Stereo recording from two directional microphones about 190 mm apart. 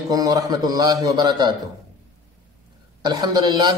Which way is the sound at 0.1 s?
20° right (ahead or behind).